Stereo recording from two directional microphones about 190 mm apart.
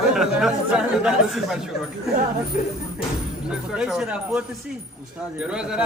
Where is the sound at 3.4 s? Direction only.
5° right (ahead or behind).